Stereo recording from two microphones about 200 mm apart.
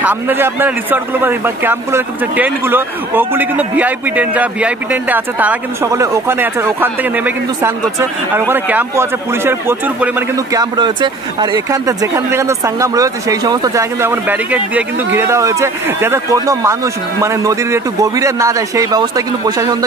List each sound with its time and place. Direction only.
0.0 s a man's voice: 10° right (ahead or behind)